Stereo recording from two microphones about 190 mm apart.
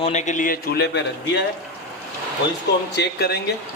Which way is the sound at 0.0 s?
35° left (ahead or behind).